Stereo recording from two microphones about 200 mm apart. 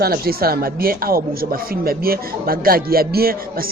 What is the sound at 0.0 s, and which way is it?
Speech, 50° right (ahead or behind).